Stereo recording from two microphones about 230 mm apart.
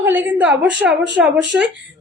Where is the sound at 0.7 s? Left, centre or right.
Right.